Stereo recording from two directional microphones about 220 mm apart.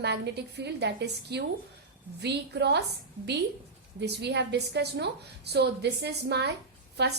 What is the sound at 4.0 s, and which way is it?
A woman's voice, 50° right (ahead or behind).